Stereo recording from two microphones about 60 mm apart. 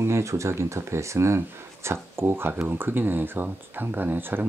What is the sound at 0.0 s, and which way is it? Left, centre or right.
Speech, right.